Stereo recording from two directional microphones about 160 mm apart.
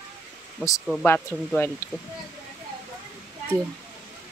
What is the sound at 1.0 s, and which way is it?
Speech, 10° left (ahead or behind).